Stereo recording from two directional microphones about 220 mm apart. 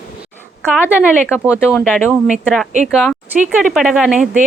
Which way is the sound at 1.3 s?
10° left (ahead or behind).